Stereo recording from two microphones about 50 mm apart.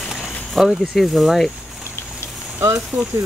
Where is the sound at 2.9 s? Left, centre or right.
Right.